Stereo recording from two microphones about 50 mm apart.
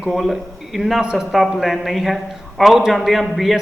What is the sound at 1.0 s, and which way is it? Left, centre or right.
Speech, centre.